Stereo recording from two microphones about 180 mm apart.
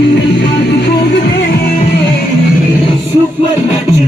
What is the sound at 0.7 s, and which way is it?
Music, 70° left (ahead or behind).